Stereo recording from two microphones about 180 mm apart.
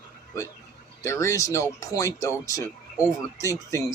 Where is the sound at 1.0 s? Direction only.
15° left (ahead or behind).